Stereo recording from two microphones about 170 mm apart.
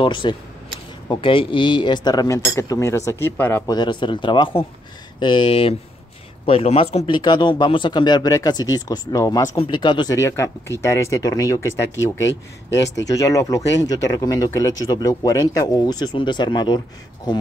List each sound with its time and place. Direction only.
0.0 s speech: 30° left (ahead or behind)
13.1 s speech: 20° left (ahead or behind)